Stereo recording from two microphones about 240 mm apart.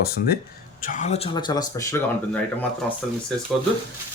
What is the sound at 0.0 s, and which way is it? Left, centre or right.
Speech, left.